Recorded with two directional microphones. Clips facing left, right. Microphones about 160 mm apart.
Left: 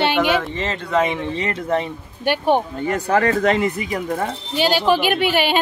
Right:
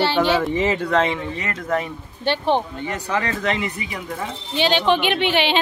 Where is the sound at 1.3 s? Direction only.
30° left (ahead or behind).